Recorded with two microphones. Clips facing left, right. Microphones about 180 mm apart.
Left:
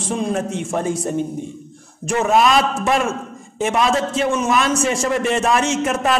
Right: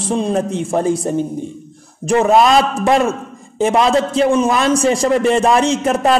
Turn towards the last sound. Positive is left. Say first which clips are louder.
# right 4 dB
turn(degrees=-35)  # may be behind; listen again after turning